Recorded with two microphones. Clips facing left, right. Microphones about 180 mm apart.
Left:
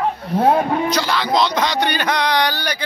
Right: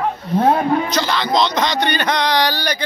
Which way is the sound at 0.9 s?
10° left (ahead or behind).